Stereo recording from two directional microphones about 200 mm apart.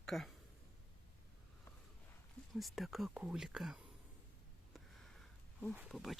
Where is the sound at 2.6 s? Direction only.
Centre (ahead or behind).